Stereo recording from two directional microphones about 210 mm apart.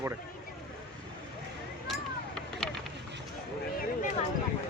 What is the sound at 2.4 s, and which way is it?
Vehicle, 5° left (ahead or behind).